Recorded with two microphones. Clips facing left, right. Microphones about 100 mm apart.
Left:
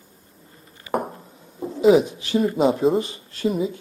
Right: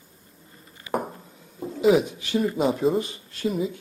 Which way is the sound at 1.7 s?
30° left (ahead or behind).